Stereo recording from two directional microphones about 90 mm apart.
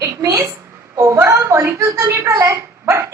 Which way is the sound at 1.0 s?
30° right (ahead or behind).